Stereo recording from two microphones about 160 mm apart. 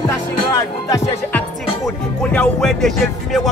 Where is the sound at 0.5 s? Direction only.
20° left (ahead or behind).